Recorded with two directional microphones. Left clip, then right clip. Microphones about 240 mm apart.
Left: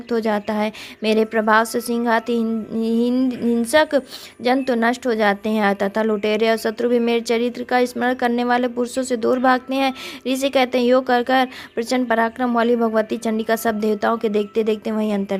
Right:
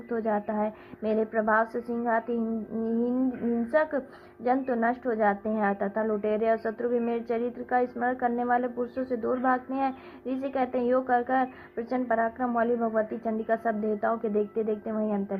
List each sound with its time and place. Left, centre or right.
0.1 s a woman's voice: left